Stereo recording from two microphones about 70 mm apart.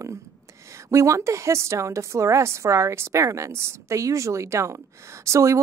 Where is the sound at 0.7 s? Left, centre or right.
Right.